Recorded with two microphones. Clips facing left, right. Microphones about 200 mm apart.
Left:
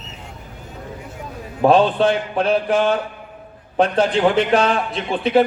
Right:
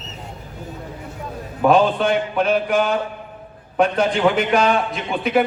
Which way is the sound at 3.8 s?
30° left (ahead or behind).